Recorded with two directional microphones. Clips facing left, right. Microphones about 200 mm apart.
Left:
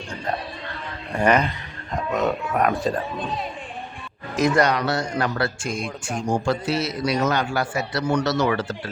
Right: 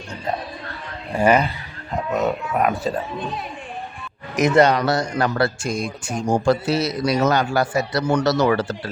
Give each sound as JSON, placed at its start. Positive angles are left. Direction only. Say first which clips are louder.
{"t": 1.1, "sound": "speech", "louder": "right 2 dB", "side_deg": -10}
{"t": 4.4, "sound": "speech", "louder": "right 4 dB", "side_deg": -20}
{"t": 4.9, "sound": "a man's voice", "louder": "right 3 dB", "side_deg": -40}